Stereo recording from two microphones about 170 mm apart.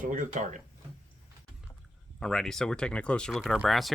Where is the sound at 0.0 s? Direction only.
50° right (ahead or behind).